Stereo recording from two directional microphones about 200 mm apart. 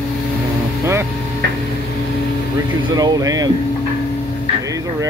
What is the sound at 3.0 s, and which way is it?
Speech, 20° right (ahead or behind).